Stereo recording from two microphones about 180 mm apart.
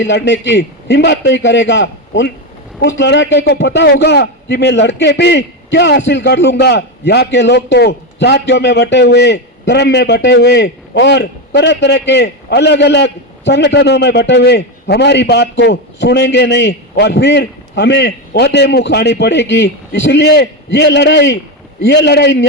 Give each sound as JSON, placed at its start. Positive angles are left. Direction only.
{"t": 0.0, "sound": "a man's voice", "side_deg": 75}